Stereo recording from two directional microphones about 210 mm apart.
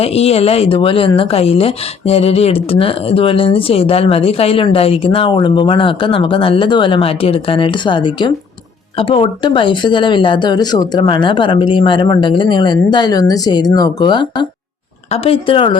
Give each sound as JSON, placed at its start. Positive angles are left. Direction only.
{"t": 0.0, "sound": "speech", "side_deg": 30}